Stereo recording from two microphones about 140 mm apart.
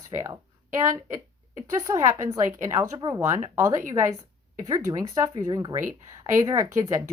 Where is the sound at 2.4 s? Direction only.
70° right (ahead or behind).